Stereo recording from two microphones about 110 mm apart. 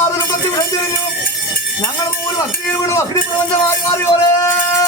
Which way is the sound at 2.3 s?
30° left (ahead or behind).